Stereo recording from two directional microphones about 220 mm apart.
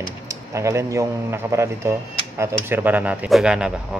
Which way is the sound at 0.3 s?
15° right (ahead or behind).